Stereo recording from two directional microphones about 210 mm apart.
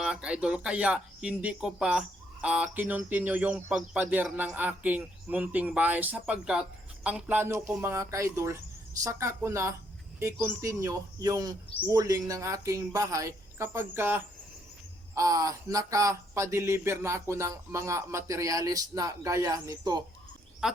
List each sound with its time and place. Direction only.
0.0 s speech: 5° right (ahead or behind)